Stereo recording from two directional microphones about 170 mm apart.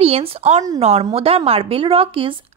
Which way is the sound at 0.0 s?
35° right (ahead or behind).